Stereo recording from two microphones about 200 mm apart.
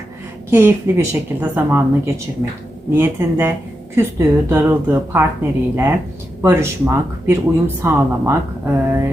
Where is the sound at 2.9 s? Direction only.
10° right (ahead or behind).